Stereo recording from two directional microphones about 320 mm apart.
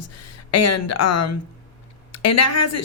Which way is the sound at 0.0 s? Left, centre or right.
Left.